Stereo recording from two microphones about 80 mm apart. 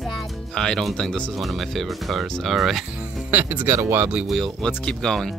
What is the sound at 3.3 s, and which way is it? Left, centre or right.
Speech, right.